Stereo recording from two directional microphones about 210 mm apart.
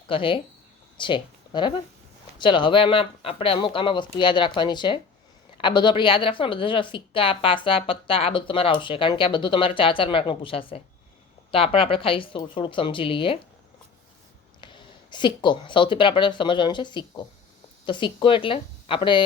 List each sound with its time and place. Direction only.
0.1 s a woman's voice: 25° left (ahead or behind)
14.6 s a woman's voice: 20° left (ahead or behind)